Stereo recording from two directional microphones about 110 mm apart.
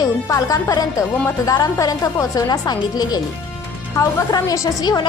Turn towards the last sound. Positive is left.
turn(degrees=35)  # may be behind; listen again after turning